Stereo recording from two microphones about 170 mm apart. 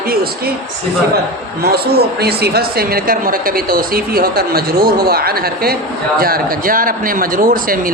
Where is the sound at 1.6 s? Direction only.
65° right (ahead or behind).